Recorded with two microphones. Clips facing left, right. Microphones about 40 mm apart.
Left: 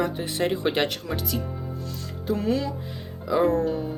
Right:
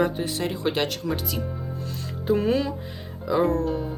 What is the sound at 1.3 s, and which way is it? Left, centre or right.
Speech, centre.